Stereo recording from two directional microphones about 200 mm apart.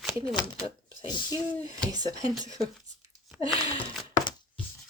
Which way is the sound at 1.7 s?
20° right (ahead or behind).